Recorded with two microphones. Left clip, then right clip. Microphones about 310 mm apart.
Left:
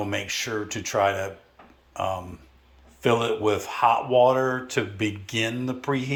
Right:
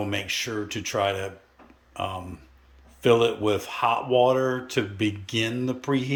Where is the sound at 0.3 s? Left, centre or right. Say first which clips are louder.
Even; centre.